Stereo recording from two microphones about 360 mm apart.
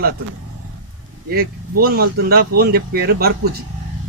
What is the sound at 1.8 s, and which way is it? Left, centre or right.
Speech, right.